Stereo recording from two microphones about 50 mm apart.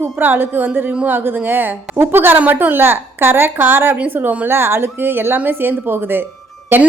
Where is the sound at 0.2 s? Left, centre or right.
Right.